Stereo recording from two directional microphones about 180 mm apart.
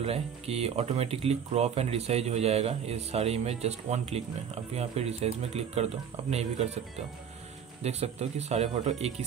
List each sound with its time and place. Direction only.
0.0 s speech: 35° right (ahead or behind)
7.8 s speech: 35° right (ahead or behind)